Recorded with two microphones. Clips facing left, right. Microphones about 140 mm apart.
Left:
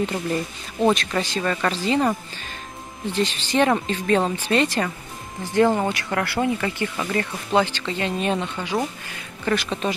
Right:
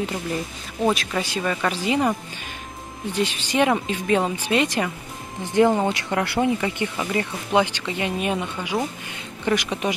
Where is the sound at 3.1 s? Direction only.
15° right (ahead or behind).